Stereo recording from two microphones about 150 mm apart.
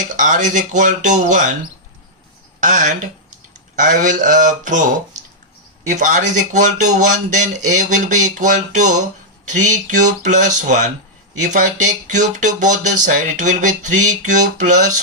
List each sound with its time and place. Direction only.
0.2 s speech: 55° right (ahead or behind)
2.6 s speech: 60° right (ahead or behind)
5.9 s speech: 60° right (ahead or behind)